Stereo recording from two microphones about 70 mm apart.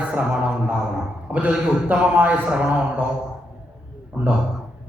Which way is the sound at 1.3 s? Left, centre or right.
Centre.